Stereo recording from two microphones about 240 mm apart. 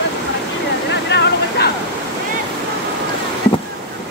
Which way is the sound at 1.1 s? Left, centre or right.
Left.